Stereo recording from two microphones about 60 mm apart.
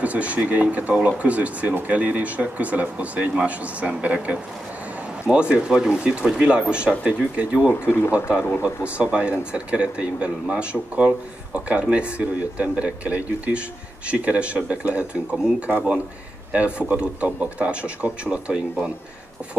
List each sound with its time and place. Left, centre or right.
0.0 s speech: right